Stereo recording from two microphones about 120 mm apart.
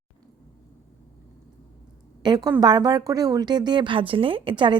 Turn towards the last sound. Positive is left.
turn(degrees=-40)  # may be behind; listen again after turning